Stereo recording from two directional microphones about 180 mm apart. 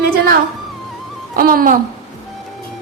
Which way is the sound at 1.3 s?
50° right (ahead or behind).